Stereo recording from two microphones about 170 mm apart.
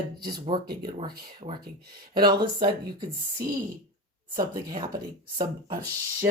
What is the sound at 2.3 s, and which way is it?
Speech, 25° right (ahead or behind).